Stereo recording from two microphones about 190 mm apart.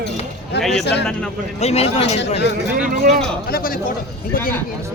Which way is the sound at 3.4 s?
50° left (ahead or behind).